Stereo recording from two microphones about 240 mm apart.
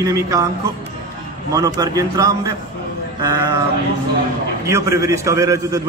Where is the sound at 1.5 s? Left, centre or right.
Centre.